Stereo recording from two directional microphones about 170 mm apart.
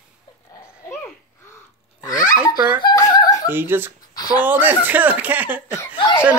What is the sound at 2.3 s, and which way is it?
Speech, 10° right (ahead or behind).